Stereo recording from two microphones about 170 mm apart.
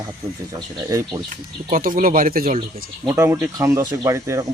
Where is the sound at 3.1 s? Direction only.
15° right (ahead or behind).